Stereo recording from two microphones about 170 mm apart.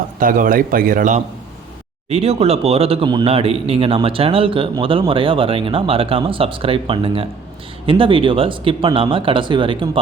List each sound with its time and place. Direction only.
0.2 s a man's voice: 55° right (ahead or behind)
2.0 s speech: 40° right (ahead or behind)